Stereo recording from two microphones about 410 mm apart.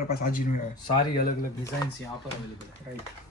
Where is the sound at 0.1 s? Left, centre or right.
Left.